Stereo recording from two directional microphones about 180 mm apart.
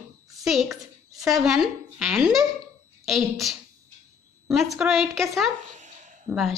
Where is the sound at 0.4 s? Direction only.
Centre (ahead or behind).